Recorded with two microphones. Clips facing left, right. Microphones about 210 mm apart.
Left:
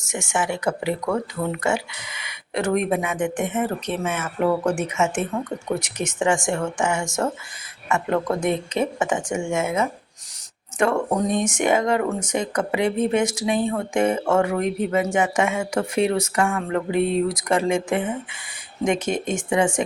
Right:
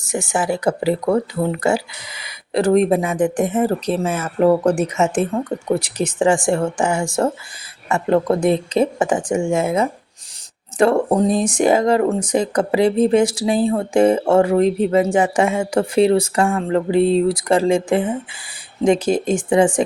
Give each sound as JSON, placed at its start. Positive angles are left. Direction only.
{"t": 0.0, "sound": "speech", "side_deg": -35}